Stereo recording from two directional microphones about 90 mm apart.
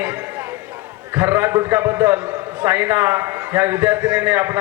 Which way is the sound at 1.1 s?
30° right (ahead or behind).